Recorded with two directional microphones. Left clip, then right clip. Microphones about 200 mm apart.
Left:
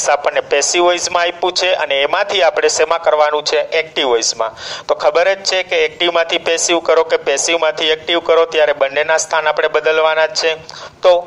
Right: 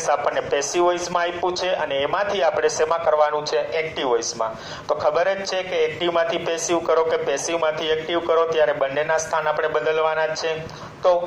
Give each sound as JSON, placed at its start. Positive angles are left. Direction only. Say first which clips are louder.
{"t": 0.1, "sound": "a man's voice", "louder": "left 7 dB", "side_deg": 55}